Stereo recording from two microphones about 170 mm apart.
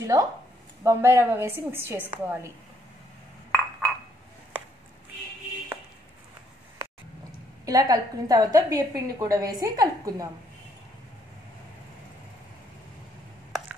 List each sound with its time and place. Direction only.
0.0 s a woman's voice: 20° right (ahead or behind)
7.6 s a woman's voice: 20° right (ahead or behind)